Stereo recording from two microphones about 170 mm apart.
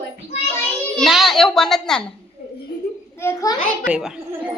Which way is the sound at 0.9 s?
Centre (ahead or behind).